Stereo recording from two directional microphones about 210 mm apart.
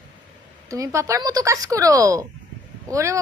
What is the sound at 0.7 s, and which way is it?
A woman's voice, 15° right (ahead or behind).